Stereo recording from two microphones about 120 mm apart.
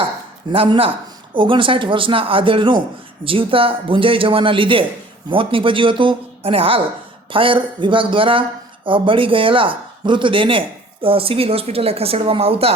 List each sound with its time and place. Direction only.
0.5 s speech: 50° right (ahead or behind)